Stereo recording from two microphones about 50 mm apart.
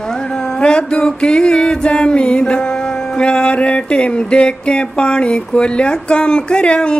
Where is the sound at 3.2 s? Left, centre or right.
Left.